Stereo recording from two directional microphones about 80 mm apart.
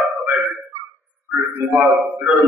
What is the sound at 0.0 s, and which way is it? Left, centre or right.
Speech, centre.